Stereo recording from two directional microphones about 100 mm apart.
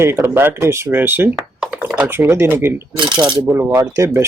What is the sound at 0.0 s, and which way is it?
Speech, 25° right (ahead or behind).